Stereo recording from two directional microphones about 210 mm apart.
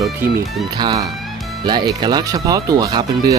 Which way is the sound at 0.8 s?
20° right (ahead or behind).